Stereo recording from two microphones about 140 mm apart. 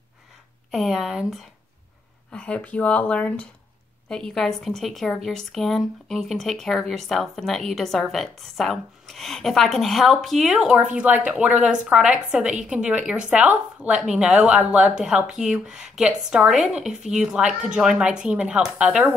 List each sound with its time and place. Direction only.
0.7 s a woman's voice: centre (ahead or behind)